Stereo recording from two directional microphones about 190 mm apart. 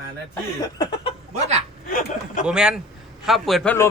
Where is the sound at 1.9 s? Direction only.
50° left (ahead or behind).